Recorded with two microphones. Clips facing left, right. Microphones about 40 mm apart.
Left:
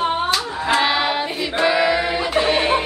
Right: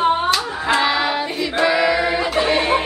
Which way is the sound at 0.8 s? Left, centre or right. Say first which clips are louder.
Even; centre.